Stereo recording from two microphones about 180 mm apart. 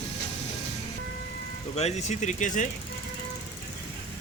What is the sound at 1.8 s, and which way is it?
Speech, 40° left (ahead or behind).